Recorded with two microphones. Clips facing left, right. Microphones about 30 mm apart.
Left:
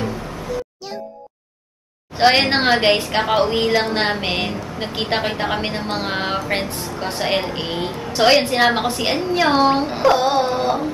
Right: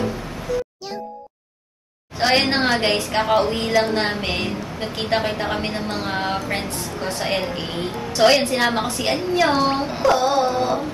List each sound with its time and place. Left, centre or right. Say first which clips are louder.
2.1 s a woman's voice: left 3 dB; left
7.1 s a woman's voice: left 3 dB; left